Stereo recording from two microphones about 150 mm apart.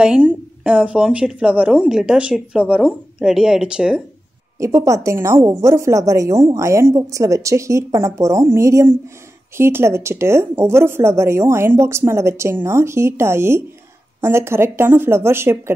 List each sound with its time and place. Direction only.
0.0 s speech: 10° right (ahead or behind)
4.6 s a woman's voice: 20° right (ahead or behind)